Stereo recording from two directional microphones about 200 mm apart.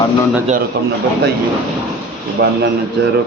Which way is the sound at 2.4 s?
55° right (ahead or behind).